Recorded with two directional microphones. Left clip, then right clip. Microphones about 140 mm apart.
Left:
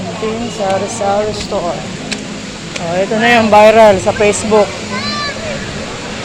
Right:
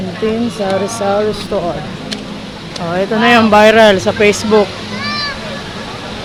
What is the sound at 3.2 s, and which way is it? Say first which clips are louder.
Speech: left 1 dB; 65° right (ahead or behind).